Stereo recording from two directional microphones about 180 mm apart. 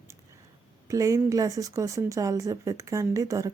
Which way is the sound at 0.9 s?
20° right (ahead or behind).